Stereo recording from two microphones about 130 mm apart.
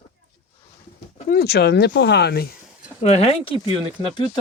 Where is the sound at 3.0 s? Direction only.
55° left (ahead or behind).